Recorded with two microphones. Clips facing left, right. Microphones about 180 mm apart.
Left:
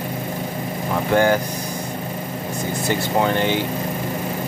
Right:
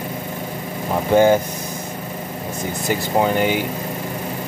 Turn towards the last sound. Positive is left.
turn(degrees=-10)  # may be behind; listen again after turning